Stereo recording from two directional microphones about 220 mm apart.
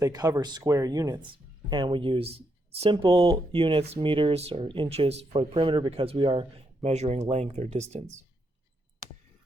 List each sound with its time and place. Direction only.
0.0 s speech: 15° right (ahead or behind)